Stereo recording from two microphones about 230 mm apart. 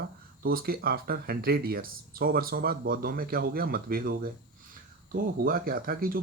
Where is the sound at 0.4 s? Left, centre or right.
Right.